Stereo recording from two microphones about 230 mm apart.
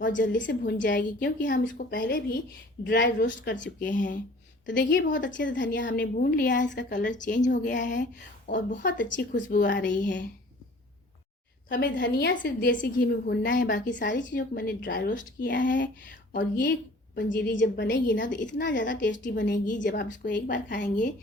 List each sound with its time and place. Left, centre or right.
0.1 s a woman's voice: left
0.4 s a woman's voice: left
4.6 s a woman's voice: left
8.5 s a woman's voice: left
9.5 s a woman's voice: left
11.7 s a woman's voice: left
16.4 s a woman's voice: left